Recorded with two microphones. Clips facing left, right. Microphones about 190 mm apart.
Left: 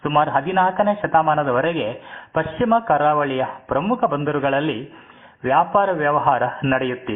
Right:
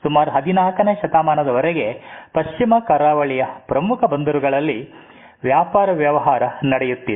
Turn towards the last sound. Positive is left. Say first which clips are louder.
# right 3 dB
turn(degrees=-15)  # may be behind; listen again after turning